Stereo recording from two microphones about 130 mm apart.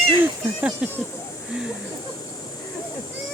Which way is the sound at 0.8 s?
10° right (ahead or behind).